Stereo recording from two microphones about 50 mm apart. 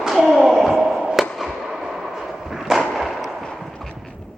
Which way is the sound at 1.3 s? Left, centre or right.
Centre.